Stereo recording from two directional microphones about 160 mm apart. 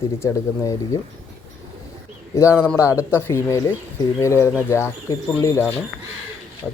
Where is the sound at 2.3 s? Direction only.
15° left (ahead or behind).